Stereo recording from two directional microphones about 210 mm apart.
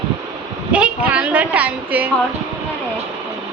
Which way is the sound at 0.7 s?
5° right (ahead or behind).